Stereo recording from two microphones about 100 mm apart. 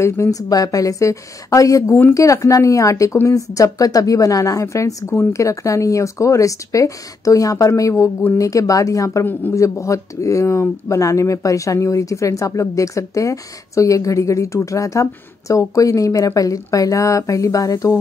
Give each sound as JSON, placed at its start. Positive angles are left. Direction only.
{"t": 0.0, "sound": "speech", "side_deg": 30}
{"t": 9.2, "sound": "speech", "side_deg": 20}
{"t": 9.5, "sound": "speech", "side_deg": 30}